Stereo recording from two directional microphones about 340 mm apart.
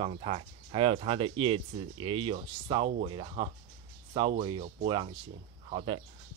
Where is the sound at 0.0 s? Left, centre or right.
Centre.